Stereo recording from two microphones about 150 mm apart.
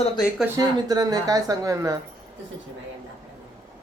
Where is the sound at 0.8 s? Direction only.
25° right (ahead or behind).